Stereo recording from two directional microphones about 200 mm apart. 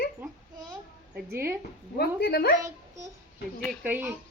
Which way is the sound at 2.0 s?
50° left (ahead or behind).